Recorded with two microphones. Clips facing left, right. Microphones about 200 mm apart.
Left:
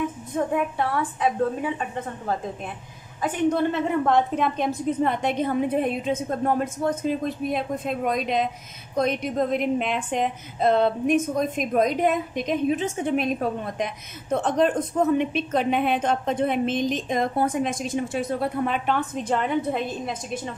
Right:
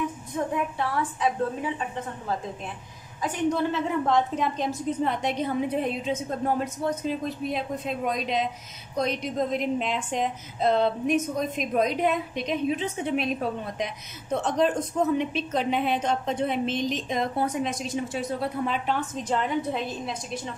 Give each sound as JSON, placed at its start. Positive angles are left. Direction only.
{"t": 0.7, "sound": "a woman's voice", "side_deg": 55}
{"t": 3.2, "sound": "a woman's voice", "side_deg": 55}